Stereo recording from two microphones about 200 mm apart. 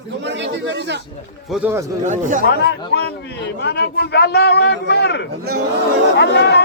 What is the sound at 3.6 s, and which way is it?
A man's voice, 60° left (ahead or behind).